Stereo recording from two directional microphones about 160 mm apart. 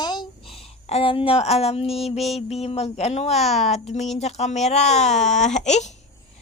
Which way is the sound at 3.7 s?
45° left (ahead or behind).